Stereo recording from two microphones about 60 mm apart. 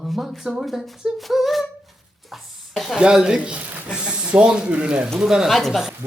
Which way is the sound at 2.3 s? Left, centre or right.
Centre.